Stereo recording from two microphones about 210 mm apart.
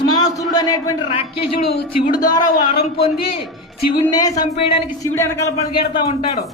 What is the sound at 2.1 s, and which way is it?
Speech, 20° left (ahead or behind).